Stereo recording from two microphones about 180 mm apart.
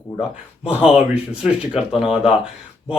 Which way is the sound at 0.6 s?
5° right (ahead or behind).